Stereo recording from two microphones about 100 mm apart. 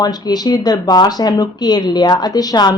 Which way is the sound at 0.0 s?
40° left (ahead or behind).